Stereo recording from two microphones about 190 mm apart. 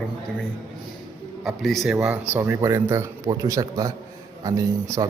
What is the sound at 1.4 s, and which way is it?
A man's voice, centre (ahead or behind).